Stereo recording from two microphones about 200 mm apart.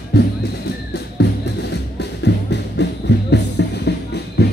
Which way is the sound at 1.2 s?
60° left (ahead or behind).